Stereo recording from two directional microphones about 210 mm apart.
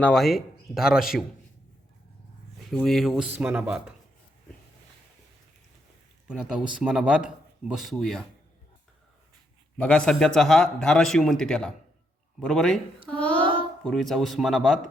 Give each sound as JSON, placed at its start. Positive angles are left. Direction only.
{"t": 0.0, "sound": "speech", "side_deg": 0}
{"t": 2.6, "sound": "speech", "side_deg": 0}
{"t": 6.2, "sound": "speech", "side_deg": -5}
{"t": 9.7, "sound": "speech", "side_deg": 5}